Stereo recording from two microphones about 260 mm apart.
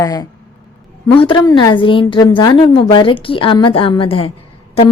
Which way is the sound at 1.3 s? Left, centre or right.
Centre.